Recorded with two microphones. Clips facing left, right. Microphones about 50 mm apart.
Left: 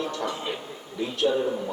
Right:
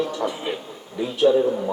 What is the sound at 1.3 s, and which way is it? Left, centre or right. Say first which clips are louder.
Speech: right 8 dB; right.